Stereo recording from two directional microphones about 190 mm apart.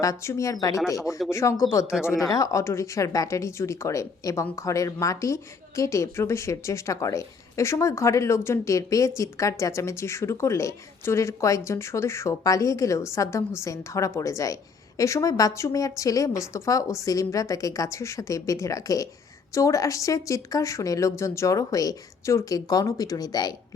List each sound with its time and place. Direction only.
0.0 s speech: 15° left (ahead or behind)